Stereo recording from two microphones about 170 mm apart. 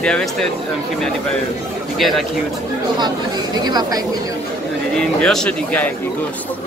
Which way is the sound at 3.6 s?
25° right (ahead or behind).